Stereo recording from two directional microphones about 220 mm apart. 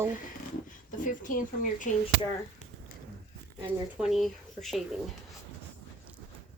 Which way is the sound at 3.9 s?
Centre (ahead or behind).